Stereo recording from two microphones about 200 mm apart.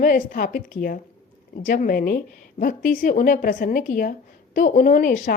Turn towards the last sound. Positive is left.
turn(degrees=45)  # may be behind; listen again after turning